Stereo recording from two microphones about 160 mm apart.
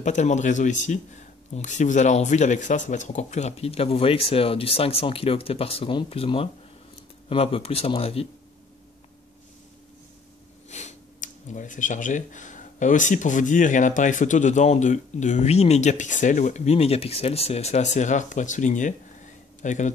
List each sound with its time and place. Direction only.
0.0 s speech: 45° left (ahead or behind)
10.7 s speech: 45° left (ahead or behind)